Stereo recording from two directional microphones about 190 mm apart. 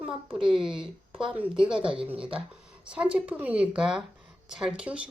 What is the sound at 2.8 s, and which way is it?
A woman's voice, 5° right (ahead or behind).